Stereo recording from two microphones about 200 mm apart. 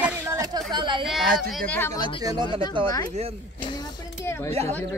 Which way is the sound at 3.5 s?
20° left (ahead or behind).